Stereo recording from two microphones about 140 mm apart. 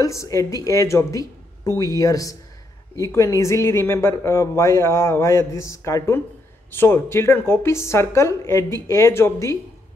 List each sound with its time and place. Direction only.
0.0 s speech: 20° left (ahead or behind)